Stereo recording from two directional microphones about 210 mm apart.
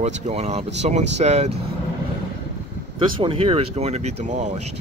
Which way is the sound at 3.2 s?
25° right (ahead or behind).